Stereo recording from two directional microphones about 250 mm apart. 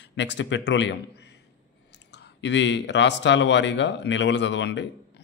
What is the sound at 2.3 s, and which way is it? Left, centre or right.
Speech, left.